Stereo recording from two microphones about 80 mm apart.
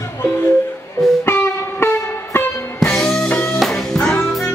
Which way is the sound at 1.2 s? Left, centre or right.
Left.